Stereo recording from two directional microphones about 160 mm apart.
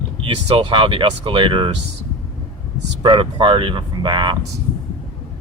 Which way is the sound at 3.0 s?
30° right (ahead or behind).